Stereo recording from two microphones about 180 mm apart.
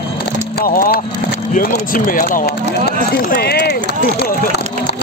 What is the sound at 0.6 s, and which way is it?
Vehicle, 50° left (ahead or behind).